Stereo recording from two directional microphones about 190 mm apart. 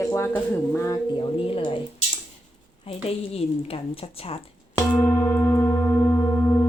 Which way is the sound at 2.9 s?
30° left (ahead or behind).